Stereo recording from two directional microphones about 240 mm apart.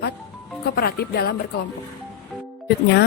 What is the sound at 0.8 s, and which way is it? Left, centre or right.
Speech, left.